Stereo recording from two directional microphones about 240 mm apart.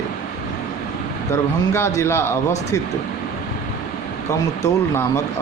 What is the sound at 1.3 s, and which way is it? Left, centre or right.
Speech, centre.